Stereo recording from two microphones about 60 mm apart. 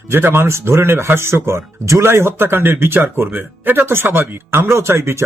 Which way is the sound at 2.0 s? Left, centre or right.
Right.